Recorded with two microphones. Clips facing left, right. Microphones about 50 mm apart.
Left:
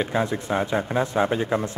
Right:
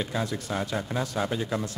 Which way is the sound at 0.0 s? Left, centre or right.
Left.